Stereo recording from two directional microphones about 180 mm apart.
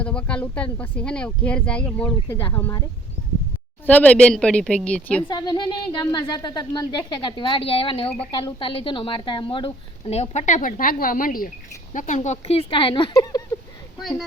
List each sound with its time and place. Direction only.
0.0 s speech: 5° left (ahead or behind)
3.8 s speech: 10° left (ahead or behind)
5.3 s a woman's voice: 25° left (ahead or behind)
14.0 s speech: centre (ahead or behind)